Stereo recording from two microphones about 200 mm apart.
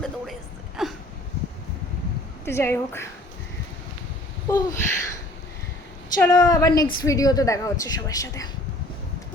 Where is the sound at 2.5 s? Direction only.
10° left (ahead or behind).